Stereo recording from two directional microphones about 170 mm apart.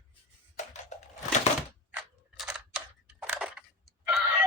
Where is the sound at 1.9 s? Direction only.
5° right (ahead or behind).